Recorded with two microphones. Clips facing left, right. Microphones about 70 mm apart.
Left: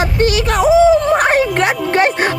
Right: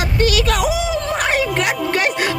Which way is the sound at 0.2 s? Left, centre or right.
Left.